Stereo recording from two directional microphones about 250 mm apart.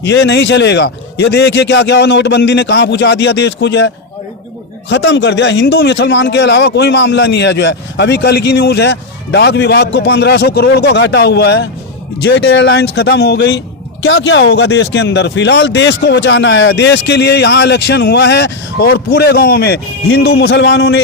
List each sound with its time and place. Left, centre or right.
0.0 s speech: left